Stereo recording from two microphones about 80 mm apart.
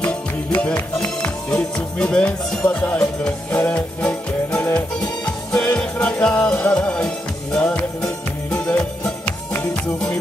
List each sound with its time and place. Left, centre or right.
0.5 s music: centre